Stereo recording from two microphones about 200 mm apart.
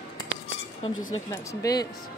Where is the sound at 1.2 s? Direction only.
20° left (ahead or behind).